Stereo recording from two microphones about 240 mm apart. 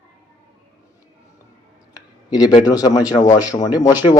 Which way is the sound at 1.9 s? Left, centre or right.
Centre.